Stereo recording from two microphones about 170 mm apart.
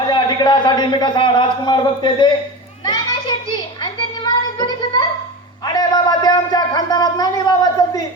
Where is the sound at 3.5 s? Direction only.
25° left (ahead or behind).